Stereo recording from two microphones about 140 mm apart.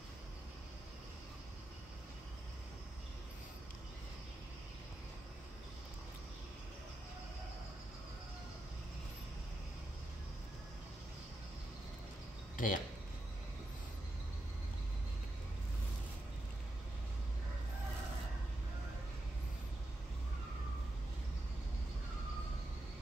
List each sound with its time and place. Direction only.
12.5 s speech: 75° left (ahead or behind)